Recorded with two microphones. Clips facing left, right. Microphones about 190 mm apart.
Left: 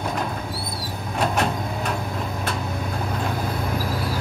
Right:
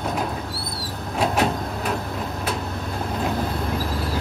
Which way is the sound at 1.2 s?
5° right (ahead or behind).